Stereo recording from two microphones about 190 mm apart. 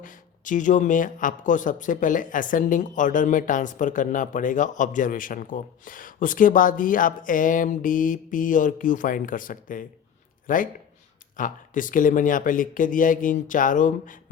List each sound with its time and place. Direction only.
0.0 s speech: 45° left (ahead or behind)